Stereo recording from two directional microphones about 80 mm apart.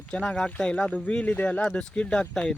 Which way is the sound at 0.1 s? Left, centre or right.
Centre.